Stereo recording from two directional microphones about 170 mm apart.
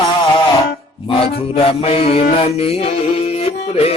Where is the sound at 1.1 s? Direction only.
35° left (ahead or behind).